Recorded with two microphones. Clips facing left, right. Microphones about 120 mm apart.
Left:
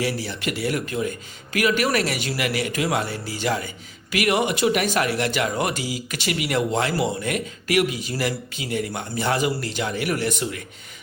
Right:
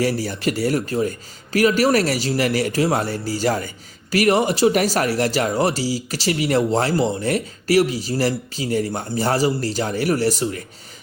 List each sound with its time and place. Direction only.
0.0 s speech: 40° right (ahead or behind)